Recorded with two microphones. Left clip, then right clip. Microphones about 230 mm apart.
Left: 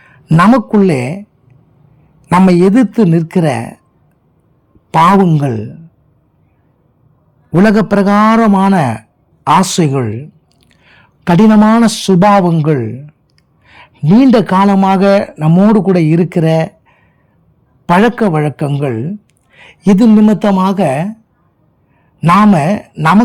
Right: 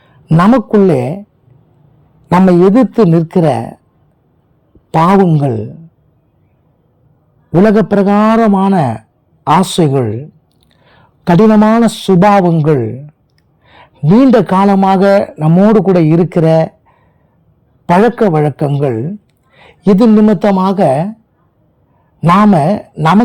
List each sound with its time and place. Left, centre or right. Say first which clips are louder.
0.3 s a man's voice: even; left
2.3 s a man's voice: right 1 dB; centre
4.9 s a man's voice: left 1 dB; left
7.5 s a man's voice: right 1 dB; centre
8.0 s a man's voice: even; left; by 21.2 s centre
22.3 s a man's voice: even; centre